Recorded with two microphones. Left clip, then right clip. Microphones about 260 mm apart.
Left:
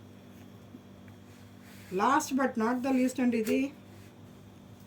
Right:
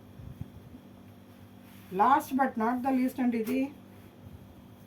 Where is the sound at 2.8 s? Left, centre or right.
Centre.